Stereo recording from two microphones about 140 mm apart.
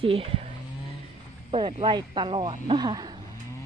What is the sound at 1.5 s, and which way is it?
A woman's voice, 40° right (ahead or behind).